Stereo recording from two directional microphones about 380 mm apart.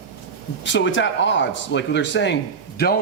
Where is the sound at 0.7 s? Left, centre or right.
Left.